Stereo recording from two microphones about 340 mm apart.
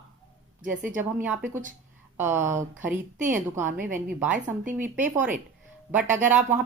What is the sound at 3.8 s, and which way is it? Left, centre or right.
A woman's voice, right.